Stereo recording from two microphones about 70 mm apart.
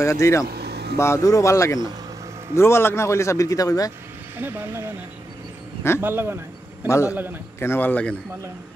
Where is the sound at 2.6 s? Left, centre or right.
Left.